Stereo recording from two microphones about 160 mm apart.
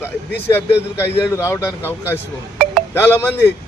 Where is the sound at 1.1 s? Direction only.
15° left (ahead or behind).